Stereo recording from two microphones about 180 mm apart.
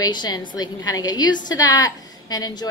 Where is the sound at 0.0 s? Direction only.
25° left (ahead or behind).